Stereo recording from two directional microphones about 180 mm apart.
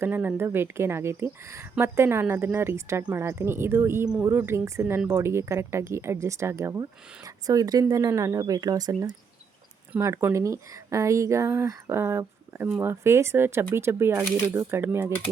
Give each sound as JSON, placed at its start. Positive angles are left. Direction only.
{"t": 0.0, "sound": "speech", "side_deg": -10}